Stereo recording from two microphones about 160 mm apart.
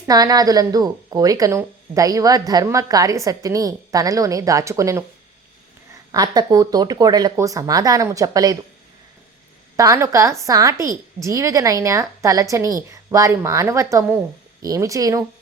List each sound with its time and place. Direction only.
0.1 s a woman's voice: 25° right (ahead or behind)
6.1 s a woman's voice: 25° right (ahead or behind)
9.7 s a woman's voice: 20° right (ahead or behind)